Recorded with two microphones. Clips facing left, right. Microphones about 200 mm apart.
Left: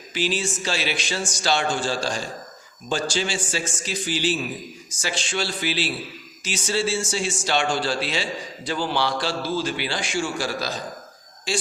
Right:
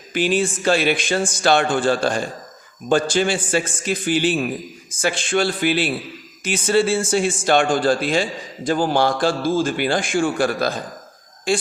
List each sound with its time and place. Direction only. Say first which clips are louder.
0.1 s a man's voice: right 6 dB; 55° right (ahead or behind)